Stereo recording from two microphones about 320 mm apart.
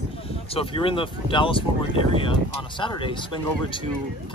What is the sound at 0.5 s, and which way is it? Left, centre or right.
Speech, centre.